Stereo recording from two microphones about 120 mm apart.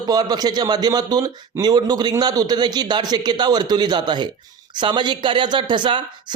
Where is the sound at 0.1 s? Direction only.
35° right (ahead or behind).